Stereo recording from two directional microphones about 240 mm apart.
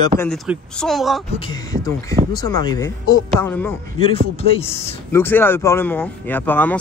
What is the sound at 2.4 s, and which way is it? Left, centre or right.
A man's voice, centre.